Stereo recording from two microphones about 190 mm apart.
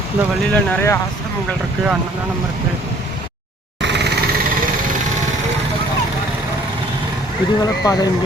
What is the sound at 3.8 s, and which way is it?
Vehicle, 65° right (ahead or behind).